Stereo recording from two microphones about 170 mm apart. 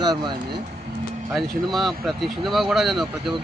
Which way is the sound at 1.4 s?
Centre (ahead or behind).